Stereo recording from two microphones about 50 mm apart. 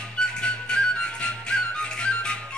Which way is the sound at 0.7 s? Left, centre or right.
Centre.